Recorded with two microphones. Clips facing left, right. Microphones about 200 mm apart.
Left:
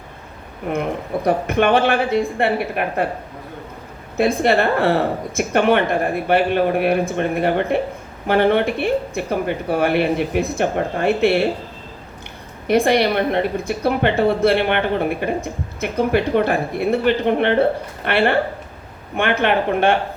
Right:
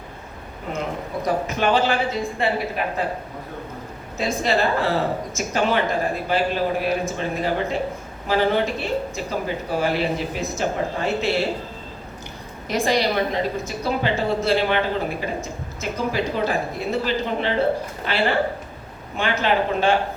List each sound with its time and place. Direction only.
0.7 s speech: 60° left (ahead or behind)
4.2 s speech: 60° left (ahead or behind)
12.6 s speech: 60° left (ahead or behind)